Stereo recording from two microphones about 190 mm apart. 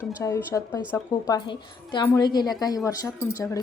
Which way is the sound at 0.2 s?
15° left (ahead or behind).